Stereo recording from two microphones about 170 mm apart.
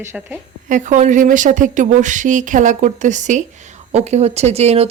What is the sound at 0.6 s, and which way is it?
A woman's voice, 50° right (ahead or behind).